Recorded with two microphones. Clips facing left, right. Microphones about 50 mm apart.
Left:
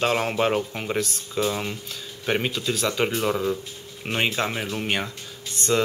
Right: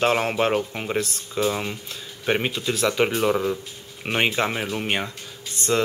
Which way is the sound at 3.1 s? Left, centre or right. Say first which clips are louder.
Right 3 dB; centre.